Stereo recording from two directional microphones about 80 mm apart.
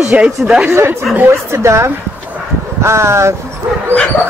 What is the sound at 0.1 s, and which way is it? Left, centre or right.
Speech, centre.